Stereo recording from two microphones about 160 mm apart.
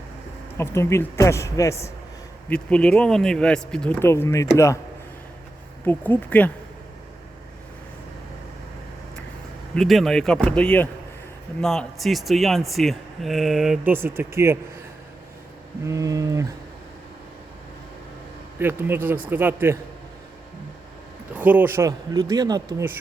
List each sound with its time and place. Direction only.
0.5 s speech: 15° left (ahead or behind)
2.5 s speech: 5° left (ahead or behind)
5.8 s speech: 10° left (ahead or behind)
9.7 s speech: centre (ahead or behind); by 14.6 s 15° right (ahead or behind)
15.9 s speech: 20° right (ahead or behind)
18.6 s a man's voice: 15° right (ahead or behind)
21.3 s speech: 10° right (ahead or behind)